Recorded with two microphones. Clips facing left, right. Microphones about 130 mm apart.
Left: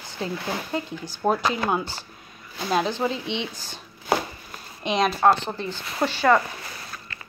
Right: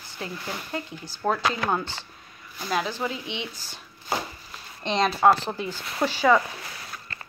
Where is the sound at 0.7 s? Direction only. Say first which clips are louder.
Left 4 dB; 15° left (ahead or behind).